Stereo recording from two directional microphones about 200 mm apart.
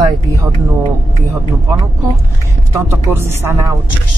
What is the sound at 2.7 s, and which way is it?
Speech, 10° right (ahead or behind).